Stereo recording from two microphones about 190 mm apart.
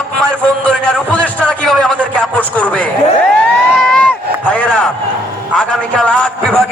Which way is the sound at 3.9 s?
5° left (ahead or behind).